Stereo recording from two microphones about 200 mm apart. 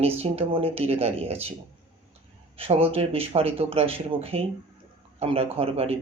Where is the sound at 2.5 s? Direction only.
30° right (ahead or behind).